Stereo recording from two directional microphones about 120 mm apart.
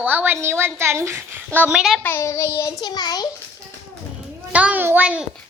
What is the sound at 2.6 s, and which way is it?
Child singing, 30° left (ahead or behind).